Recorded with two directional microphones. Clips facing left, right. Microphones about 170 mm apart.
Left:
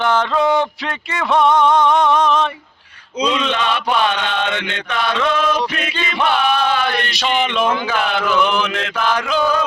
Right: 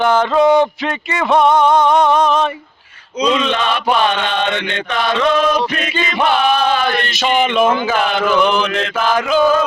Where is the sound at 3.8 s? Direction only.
5° right (ahead or behind).